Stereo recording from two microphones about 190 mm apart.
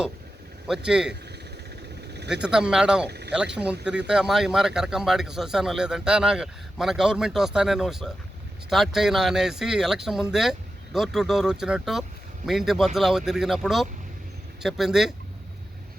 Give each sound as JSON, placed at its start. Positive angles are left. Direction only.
{"t": 0.9, "sound": "speech", "side_deg": -5}
{"t": 2.3, "sound": "speech", "side_deg": -5}
{"t": 3.1, "sound": "speech", "side_deg": -65}
{"t": 3.3, "sound": "speech", "side_deg": -5}